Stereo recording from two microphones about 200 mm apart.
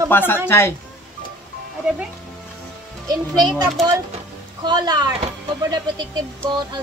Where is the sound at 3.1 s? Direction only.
20° right (ahead or behind).